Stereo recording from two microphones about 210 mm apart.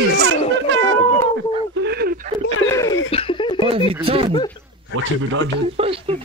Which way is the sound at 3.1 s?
25° left (ahead or behind).